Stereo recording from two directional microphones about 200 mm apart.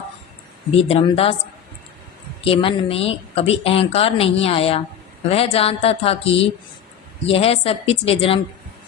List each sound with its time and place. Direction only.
0.8 s speech: 25° left (ahead or behind)
2.4 s speech: 25° left (ahead or behind)